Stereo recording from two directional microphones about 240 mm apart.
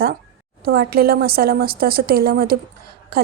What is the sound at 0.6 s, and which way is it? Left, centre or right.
A woman's voice, right.